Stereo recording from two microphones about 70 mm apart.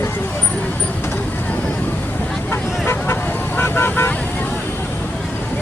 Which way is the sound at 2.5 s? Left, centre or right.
Left.